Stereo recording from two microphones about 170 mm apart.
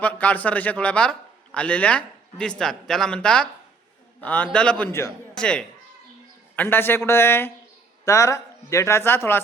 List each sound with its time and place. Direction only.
0.0 s a man's voice: 10° left (ahead or behind)
5.3 s speech: 5° left (ahead or behind)